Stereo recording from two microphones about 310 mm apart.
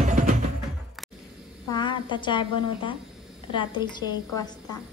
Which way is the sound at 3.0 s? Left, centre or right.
Centre.